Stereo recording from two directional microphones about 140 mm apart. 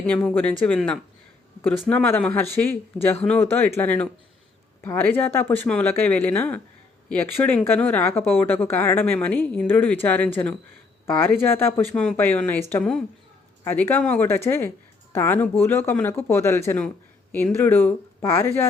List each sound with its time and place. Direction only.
0.1 s speech: 5° left (ahead or behind)